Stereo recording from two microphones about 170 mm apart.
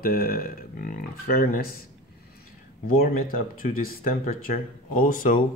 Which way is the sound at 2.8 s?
60° left (ahead or behind).